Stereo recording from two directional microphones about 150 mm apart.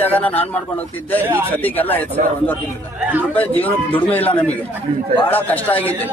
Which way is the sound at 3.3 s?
10° left (ahead or behind).